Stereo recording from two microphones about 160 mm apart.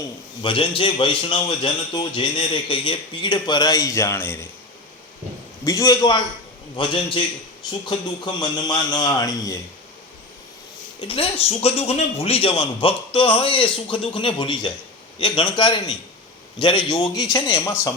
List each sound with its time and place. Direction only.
0.4 s a man's voice: 30° left (ahead or behind); by 4.4 s 15° left (ahead or behind)
5.6 s a man's voice: 25° left (ahead or behind)
11.0 s a man's voice: 35° left (ahead or behind); by 17.9 s 20° left (ahead or behind)